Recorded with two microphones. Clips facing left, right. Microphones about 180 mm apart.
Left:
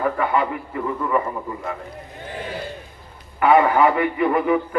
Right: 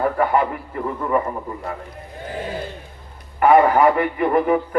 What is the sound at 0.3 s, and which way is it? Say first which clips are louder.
Speech: right 2 dB; 45° right (ahead or behind).